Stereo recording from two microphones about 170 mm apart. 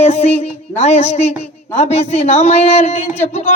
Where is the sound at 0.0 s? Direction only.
40° left (ahead or behind).